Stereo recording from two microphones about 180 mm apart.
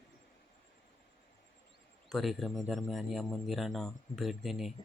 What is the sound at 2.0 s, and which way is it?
Speech, centre (ahead or behind).